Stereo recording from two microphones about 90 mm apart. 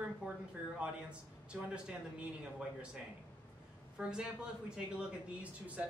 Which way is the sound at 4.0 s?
10° right (ahead or behind).